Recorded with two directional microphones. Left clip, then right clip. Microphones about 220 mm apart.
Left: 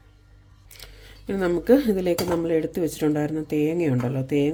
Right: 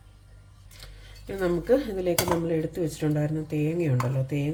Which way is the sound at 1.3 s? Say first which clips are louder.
Left 4 dB; 50° left (ahead or behind).